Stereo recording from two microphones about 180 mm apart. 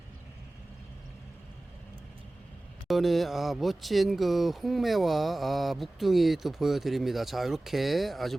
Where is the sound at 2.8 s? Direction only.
Centre (ahead or behind).